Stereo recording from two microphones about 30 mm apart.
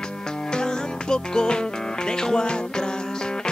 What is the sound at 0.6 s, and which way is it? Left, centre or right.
Music, left.